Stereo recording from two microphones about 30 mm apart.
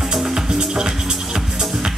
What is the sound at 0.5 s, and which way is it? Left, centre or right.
Music, right.